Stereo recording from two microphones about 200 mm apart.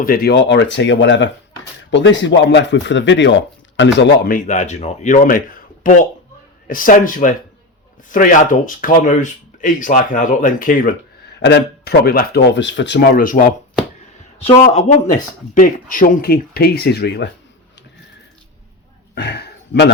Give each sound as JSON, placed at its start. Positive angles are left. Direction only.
{"t": 0.0, "sound": "speech", "side_deg": 50}
{"t": 11.3, "sound": "speech", "side_deg": 60}
{"t": 14.4, "sound": "speech", "side_deg": 30}
{"t": 19.1, "sound": "a sound", "side_deg": 55}